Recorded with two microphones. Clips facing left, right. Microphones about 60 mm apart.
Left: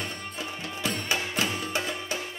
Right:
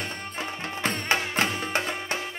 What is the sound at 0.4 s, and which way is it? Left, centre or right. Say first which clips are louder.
Music: right 4 dB; right.